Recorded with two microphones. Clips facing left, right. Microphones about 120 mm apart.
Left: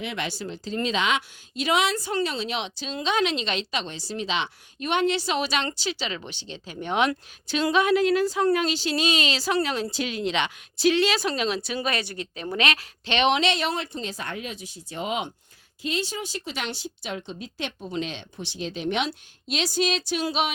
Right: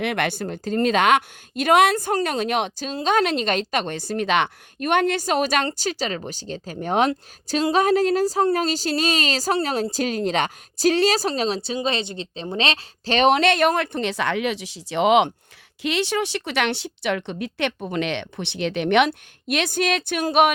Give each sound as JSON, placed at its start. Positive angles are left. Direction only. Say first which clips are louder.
{"t": 0.0, "sound": "a woman's voice", "louder": "right 7 dB", "side_deg": -60}
{"t": 13.1, "sound": "speech", "louder": "right 5 dB", "side_deg": -40}
{"t": 17.7, "sound": "a woman's voice", "louder": "right 4 dB", "side_deg": -50}
{"t": 18.0, "sound": "a woman's voice", "louder": "right 7 dB", "side_deg": -70}